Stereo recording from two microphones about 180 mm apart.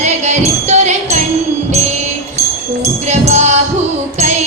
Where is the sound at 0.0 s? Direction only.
40° right (ahead or behind).